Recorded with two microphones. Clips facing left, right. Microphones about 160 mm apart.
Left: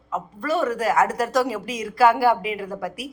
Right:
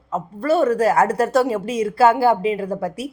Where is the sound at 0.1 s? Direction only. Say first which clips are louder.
Right 5 dB; 30° right (ahead or behind).